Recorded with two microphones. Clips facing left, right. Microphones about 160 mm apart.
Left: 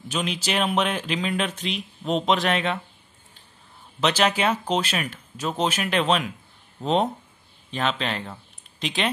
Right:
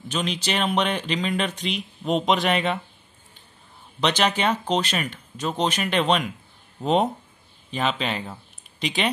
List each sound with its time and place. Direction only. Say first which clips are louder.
0.1 s speech: even; 5° left (ahead or behind)
4.0 s speech: even; 5° left (ahead or behind)